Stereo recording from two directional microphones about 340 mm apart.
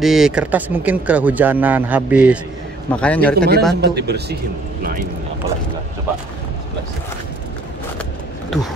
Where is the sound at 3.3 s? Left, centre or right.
Right.